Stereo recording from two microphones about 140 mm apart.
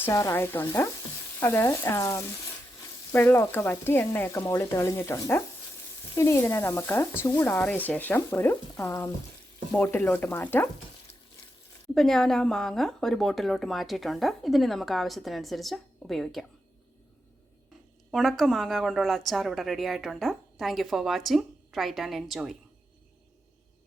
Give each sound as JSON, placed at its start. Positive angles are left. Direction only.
{"t": 0.0, "sound": "frying", "side_deg": 20}
{"t": 1.4, "sound": "speech", "side_deg": 20}
{"t": 3.1, "sound": "frying", "side_deg": 15}
{"t": 6.1, "sound": "speech", "side_deg": 20}
{"t": 7.2, "sound": "frying", "side_deg": 15}
{"t": 11.9, "sound": "a woman's voice", "side_deg": 5}
{"t": 18.1, "sound": "a woman's voice", "side_deg": 0}